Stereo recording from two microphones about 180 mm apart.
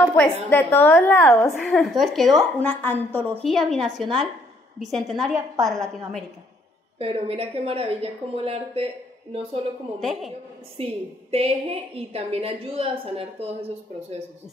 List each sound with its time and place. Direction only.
0.0 s a woman's voice: 5° left (ahead or behind)
1.6 s a woman's voice: centre (ahead or behind)
7.0 s a woman's voice: 35° right (ahead or behind)
9.9 s a woman's voice: centre (ahead or behind)
10.8 s a woman's voice: 35° right (ahead or behind)